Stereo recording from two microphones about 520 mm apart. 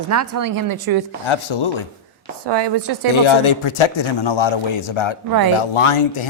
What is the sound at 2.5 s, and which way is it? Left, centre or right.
Speech, right.